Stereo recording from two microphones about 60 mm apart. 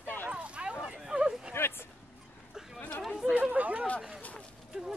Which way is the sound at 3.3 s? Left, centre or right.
Right.